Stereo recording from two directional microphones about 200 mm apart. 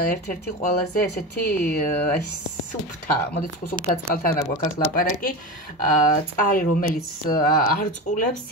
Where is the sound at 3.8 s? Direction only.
45° left (ahead or behind).